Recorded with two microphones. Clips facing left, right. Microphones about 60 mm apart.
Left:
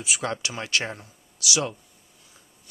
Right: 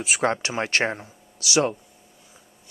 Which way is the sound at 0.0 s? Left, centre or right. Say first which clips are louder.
Right 6 dB; right.